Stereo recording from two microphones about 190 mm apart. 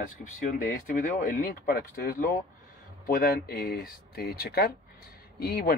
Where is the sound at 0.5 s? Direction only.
45° left (ahead or behind).